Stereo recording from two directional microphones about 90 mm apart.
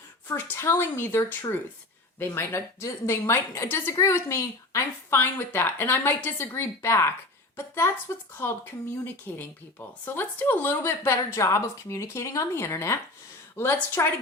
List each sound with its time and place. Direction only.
0.3 s a woman's voice: 25° left (ahead or behind)
14.0 s a woman's voice: 30° left (ahead or behind)